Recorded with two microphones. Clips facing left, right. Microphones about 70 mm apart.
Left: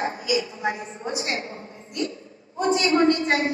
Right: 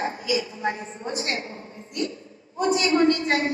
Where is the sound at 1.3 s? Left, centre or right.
Left.